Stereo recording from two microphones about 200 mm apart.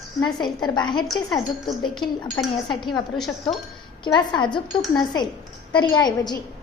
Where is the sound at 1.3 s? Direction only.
Centre (ahead or behind).